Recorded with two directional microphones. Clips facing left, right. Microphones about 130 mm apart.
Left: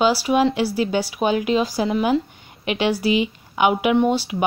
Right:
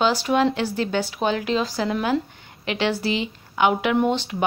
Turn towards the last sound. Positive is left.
turn(degrees=10)  # may be behind; listen again after turning